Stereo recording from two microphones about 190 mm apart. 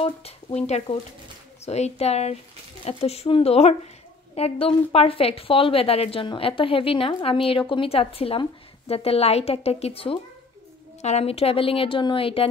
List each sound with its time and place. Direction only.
0.0 s a woman's voice: 30° left (ahead or behind)